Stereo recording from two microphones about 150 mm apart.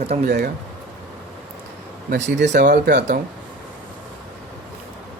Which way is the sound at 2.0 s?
60° right (ahead or behind).